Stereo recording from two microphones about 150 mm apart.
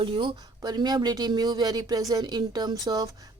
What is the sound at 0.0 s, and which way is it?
Speech, 35° right (ahead or behind).